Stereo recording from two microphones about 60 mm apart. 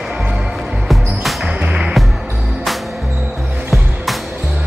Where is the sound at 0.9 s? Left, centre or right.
Centre.